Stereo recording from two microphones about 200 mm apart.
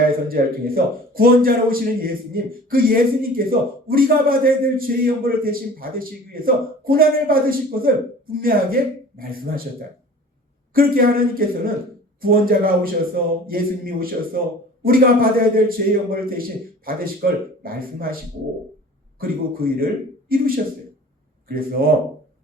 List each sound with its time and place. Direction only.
0.3 s a man's voice: 45° right (ahead or behind)
10.8 s a man's voice: 45° right (ahead or behind)
19.2 s a man's voice: 45° right (ahead or behind)